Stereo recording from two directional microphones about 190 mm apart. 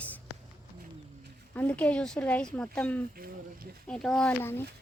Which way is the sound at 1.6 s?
10° left (ahead or behind).